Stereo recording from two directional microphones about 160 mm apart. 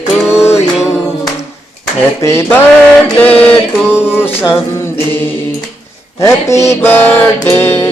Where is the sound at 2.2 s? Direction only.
15° left (ahead or behind).